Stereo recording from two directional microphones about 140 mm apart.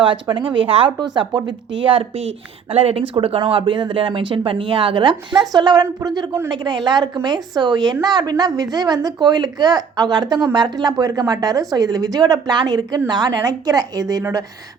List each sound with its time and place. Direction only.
0.0 s a woman's voice: 35° right (ahead or behind)